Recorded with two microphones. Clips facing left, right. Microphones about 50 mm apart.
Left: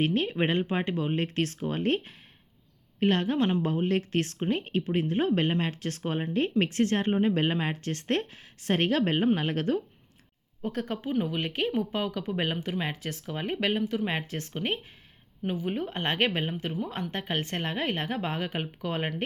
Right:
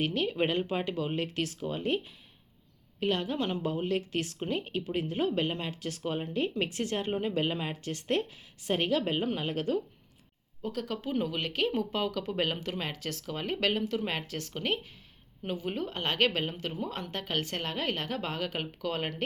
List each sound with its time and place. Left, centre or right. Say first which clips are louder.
0.0 s speech: left 3 dB; left
7.1 s speech: left 5 dB; left
11.1 s speech: left 2 dB; centre